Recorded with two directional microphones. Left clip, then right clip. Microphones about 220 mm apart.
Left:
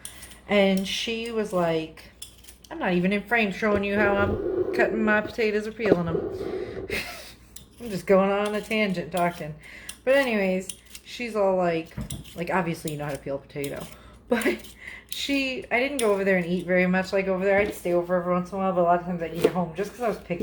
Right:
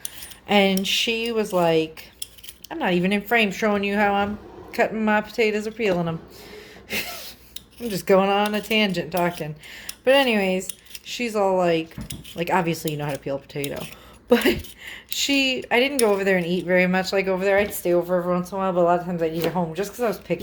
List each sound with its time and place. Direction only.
0.4 s speech: 40° right (ahead or behind)
6.6 s gasp: 35° right (ahead or behind)
7.9 s speech: 45° right (ahead or behind)